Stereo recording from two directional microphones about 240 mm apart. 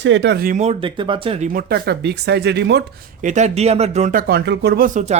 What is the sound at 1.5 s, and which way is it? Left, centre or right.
Speech, right.